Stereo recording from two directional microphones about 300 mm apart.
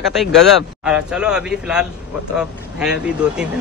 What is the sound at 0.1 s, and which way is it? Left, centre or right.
A man's voice, centre.